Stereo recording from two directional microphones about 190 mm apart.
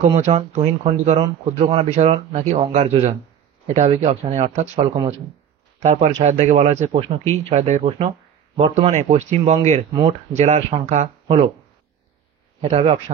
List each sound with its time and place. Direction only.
0.1 s speech: 35° right (ahead or behind)
5.8 s speech: 35° right (ahead or behind)
12.6 s speech: 30° right (ahead or behind)